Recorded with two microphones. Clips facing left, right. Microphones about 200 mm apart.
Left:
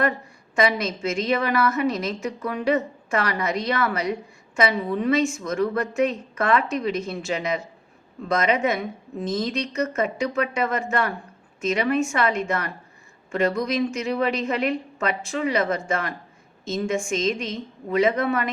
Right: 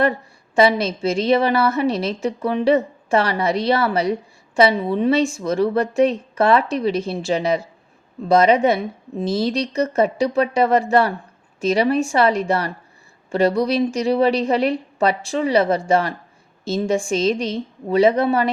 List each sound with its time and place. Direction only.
0.5 s a woman's voice: 30° right (ahead or behind)